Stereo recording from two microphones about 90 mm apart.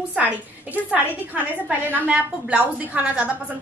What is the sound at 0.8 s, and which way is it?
A woman's voice, 15° right (ahead or behind).